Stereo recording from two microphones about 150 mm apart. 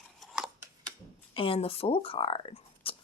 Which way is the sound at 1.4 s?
40° left (ahead or behind).